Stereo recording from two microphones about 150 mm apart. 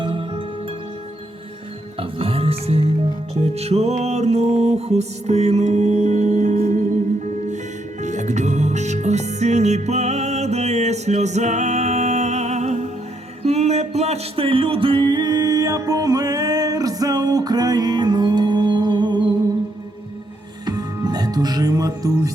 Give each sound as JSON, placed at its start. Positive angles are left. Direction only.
{"t": 0.0, "sound": "music", "side_deg": -35}
{"t": 2.0, "sound": "speech", "side_deg": -40}
{"t": 3.5, "sound": "music", "side_deg": -45}
{"t": 8.0, "sound": "music", "side_deg": -50}
{"t": 20.7, "sound": "music", "side_deg": -25}